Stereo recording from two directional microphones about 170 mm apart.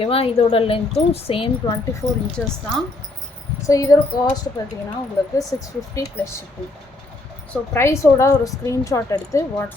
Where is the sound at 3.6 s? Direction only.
20° left (ahead or behind).